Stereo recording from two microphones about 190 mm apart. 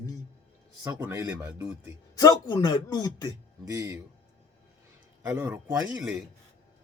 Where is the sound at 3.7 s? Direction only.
15° right (ahead or behind).